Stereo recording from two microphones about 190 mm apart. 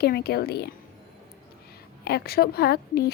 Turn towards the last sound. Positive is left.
turn(degrees=55)  # may be behind; listen again after turning